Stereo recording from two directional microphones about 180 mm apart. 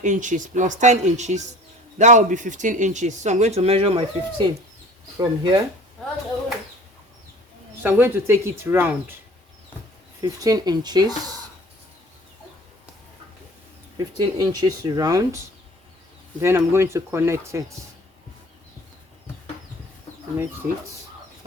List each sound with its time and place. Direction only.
0.0 s speech: 45° right (ahead or behind); by 5.6 s 25° right (ahead or behind)
7.8 s speech: 10° right (ahead or behind)
10.2 s speech: 20° right (ahead or behind)
14.2 s speech: 20° right (ahead or behind)
16.4 s speech: 15° right (ahead or behind)